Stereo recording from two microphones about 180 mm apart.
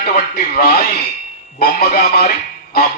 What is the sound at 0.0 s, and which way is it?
Speech, 55° left (ahead or behind).